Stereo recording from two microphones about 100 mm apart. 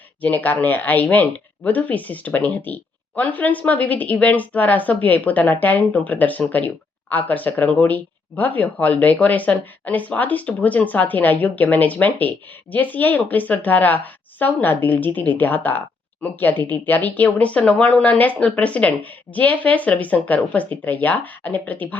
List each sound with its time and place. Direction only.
0.2 s speech: 15° left (ahead or behind)